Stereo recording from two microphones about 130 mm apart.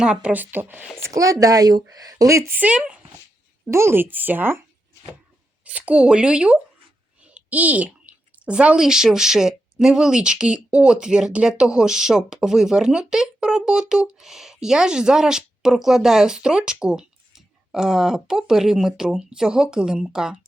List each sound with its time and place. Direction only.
0.0 s speech: 10° right (ahead or behind)
1.0 s a woman's voice: 25° right (ahead or behind)
2.6 s speech: 10° right (ahead or behind)
3.7 s speech: 20° right (ahead or behind)
5.6 s a woman's voice: 10° right (ahead or behind)